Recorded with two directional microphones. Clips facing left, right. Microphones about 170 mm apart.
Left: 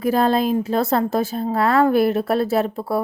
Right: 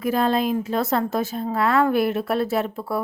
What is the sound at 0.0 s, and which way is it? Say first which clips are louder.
Speech: left 3 dB; 35° left (ahead or behind).